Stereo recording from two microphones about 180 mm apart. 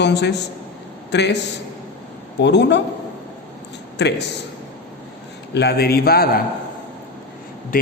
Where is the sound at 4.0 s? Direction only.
70° left (ahead or behind).